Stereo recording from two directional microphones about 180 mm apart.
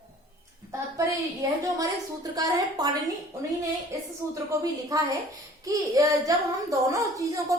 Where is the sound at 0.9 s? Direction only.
20° right (ahead or behind).